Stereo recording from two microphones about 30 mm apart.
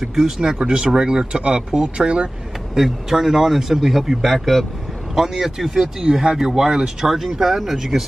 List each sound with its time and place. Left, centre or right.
0.0 s speech: centre
0.4 s speech: right
3.1 s speech: centre
5.1 s speech: centre
7.1 s speech: centre